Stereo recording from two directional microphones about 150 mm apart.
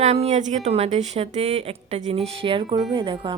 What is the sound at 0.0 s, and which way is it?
A woman's voice, 45° right (ahead or behind).